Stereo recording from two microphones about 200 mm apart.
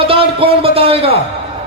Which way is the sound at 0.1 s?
25° right (ahead or behind).